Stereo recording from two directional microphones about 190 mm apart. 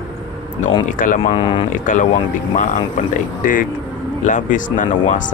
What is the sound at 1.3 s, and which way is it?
Speech, 25° left (ahead or behind).